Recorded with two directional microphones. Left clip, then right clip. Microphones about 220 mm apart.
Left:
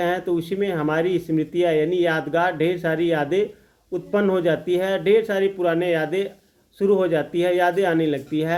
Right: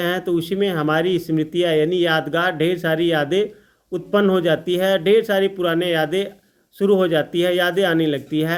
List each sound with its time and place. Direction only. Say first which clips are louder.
0.0 s speech: right 1 dB; 35° right (ahead or behind)